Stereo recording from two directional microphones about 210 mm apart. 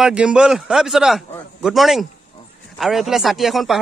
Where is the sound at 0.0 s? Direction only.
5° right (ahead or behind).